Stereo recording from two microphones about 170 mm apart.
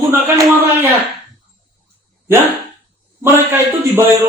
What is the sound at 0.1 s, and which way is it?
Speech, 15° right (ahead or behind).